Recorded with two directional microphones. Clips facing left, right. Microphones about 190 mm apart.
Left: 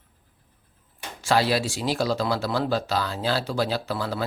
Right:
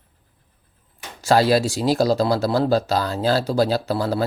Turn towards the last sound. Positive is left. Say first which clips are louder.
# right 6 dB
turn(degrees=-40)  # may be behind; listen again after turning